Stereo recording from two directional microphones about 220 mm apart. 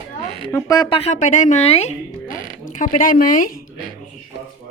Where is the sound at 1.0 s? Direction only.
30° left (ahead or behind).